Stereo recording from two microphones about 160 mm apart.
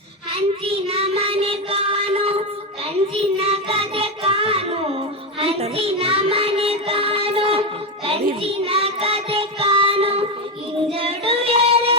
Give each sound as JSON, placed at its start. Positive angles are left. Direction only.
{"t": 0.3, "sound": "child singing", "side_deg": -40}